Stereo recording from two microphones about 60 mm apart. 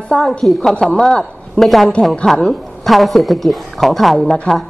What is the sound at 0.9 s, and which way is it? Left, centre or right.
Speech, centre.